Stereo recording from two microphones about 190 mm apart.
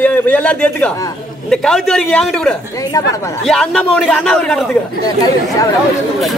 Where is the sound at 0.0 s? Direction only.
10° left (ahead or behind).